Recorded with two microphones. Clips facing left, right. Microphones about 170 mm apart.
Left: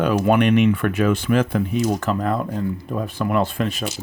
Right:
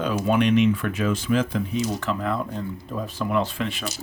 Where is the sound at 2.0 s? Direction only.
45° left (ahead or behind).